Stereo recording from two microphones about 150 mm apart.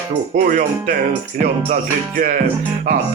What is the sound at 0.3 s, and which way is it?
Speech, 70° right (ahead or behind).